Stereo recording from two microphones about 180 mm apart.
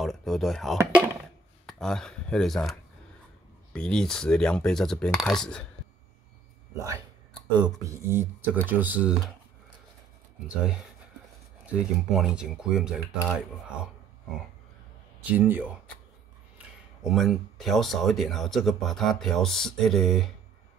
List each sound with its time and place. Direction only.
0.0 s a sound: centre (ahead or behind)
0.7 s a sound: 15° right (ahead or behind)
1.7 s speech: 5° left (ahead or behind)
7.5 s speech: 20° right (ahead or behind)
10.5 s speech: 5° right (ahead or behind)
15.2 s speech: 10° right (ahead or behind)